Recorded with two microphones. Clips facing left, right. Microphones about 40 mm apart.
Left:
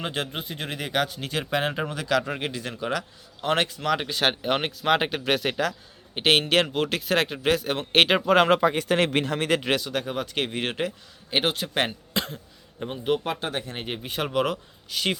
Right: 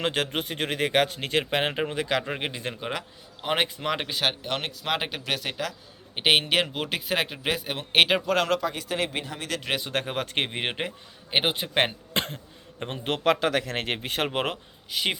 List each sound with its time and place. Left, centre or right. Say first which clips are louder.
0.0 s speech: right 3 dB; right
1.7 s a man's voice: left 1 dB; right
4.4 s speech: left 5 dB; centre
4.8 s speech: left 6 dB; centre
6.1 s speech: left 2 dB; centre
8.3 s speech: left 5 dB; centre
8.5 s speech: left 6 dB; left
8.8 s speech: left 6 dB; left
9.9 s speech: even; right
10.3 s a man's voice: left 1 dB; right
12.1 s cough: even; right
12.9 s a man's voice: right 2 dB; right
14.3 s speech: left 4 dB; right
14.8 s speech: left 1 dB; centre